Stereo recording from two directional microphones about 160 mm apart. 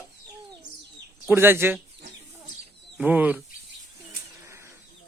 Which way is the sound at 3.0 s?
10° right (ahead or behind).